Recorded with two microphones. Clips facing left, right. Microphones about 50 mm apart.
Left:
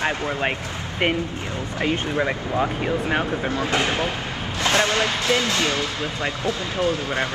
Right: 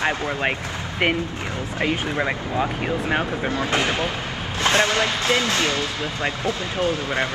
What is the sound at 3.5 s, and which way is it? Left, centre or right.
Speech, right.